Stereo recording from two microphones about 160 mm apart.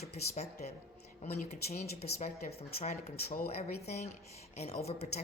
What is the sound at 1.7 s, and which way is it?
Speech, 45° left (ahead or behind).